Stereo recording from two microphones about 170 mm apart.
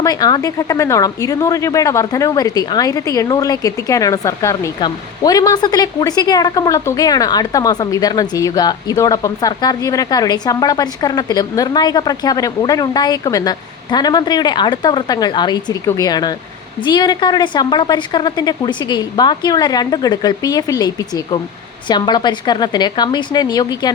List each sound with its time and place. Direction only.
0.0 s speech: 20° left (ahead or behind)